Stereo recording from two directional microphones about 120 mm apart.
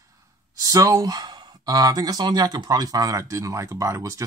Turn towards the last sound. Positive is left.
turn(degrees=-25)  # may be behind; listen again after turning